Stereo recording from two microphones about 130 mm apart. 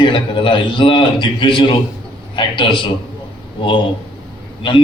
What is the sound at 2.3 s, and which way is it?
Speech, 40° left (ahead or behind).